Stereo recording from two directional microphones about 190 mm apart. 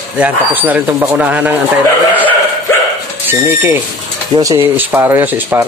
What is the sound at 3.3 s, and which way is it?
Speech, 10° right (ahead or behind).